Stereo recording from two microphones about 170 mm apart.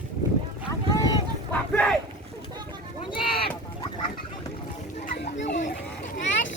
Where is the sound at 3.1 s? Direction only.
30° left (ahead or behind).